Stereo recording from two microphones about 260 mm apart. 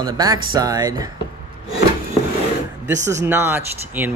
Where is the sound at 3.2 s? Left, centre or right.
Centre.